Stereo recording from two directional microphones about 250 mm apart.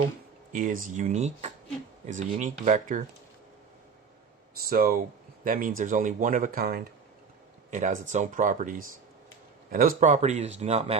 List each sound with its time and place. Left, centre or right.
0.5 s speech: right
4.6 s speech: right